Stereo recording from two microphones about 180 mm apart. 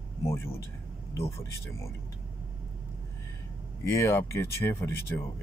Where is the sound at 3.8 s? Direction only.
15° left (ahead or behind).